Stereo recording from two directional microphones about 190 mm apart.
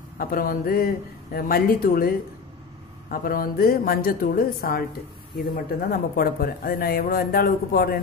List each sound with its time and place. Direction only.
0.2 s speech: 50° left (ahead or behind)
3.1 s speech: 50° left (ahead or behind)